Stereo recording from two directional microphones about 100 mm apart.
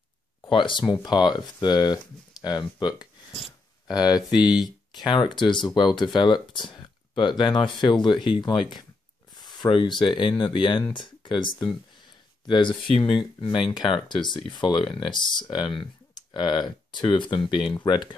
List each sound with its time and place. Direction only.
0.5 s speech: 55° left (ahead or behind)